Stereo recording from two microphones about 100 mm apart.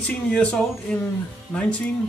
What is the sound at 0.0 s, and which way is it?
Speech, 10° left (ahead or behind).